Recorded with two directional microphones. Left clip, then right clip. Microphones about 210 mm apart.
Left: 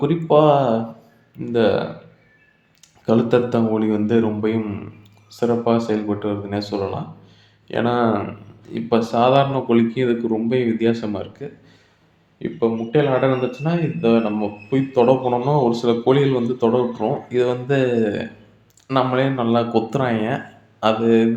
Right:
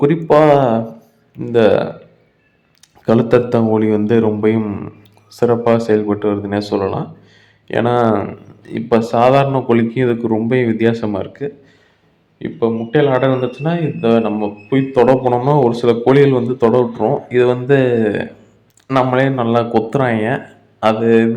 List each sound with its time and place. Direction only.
0.3 s speech: 25° right (ahead or behind)
3.1 s speech: 30° right (ahead or behind)